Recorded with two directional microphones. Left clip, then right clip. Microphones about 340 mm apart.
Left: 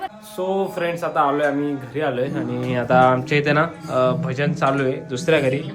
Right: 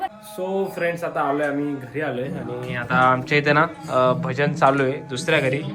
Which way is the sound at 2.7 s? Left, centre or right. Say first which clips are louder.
Left 3 dB; centre.